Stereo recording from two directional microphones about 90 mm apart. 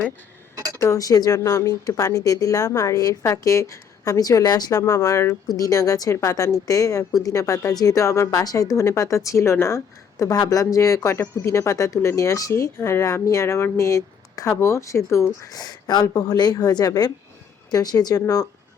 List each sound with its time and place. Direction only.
0.5 s a sound: 35° right (ahead or behind)
0.8 s speech: 35° left (ahead or behind)
15.5 s a woman's voice: 45° left (ahead or behind)